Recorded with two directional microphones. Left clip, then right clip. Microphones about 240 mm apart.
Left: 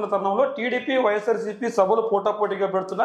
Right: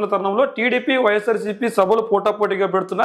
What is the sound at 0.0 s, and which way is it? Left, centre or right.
A man's voice, right.